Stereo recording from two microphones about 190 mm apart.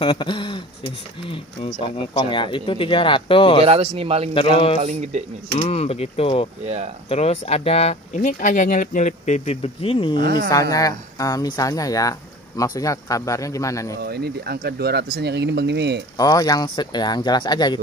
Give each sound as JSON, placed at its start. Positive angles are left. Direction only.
{"t": 0.0, "sound": "speech", "side_deg": 25}
{"t": 3.6, "sound": "speech", "side_deg": -30}
{"t": 4.3, "sound": "speech", "side_deg": 30}
{"t": 6.6, "sound": "speech", "side_deg": -35}
{"t": 7.1, "sound": "speech", "side_deg": 35}
{"t": 10.2, "sound": "speech", "side_deg": -55}
{"t": 10.5, "sound": "speech", "side_deg": 20}
{"t": 13.9, "sound": "speech", "side_deg": -55}
{"t": 16.2, "sound": "speech", "side_deg": 20}